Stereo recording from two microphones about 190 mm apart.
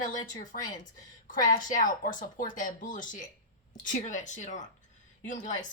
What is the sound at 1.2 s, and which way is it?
A woman's voice, 45° left (ahead or behind).